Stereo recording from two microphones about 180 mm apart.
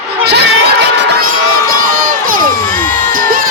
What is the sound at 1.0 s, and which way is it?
Crowd, 60° right (ahead or behind).